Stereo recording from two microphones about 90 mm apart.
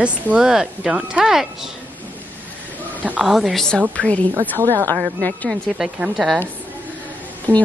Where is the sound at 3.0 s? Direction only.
15° right (ahead or behind).